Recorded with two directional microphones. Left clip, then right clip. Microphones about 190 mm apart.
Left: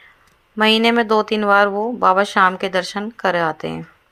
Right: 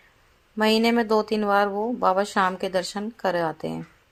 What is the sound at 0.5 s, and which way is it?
Speech, 10° left (ahead or behind).